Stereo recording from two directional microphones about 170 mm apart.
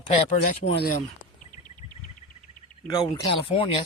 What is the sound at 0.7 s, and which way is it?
Speech, 70° left (ahead or behind).